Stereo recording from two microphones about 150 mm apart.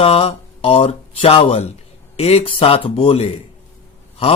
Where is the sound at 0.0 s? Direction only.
40° left (ahead or behind).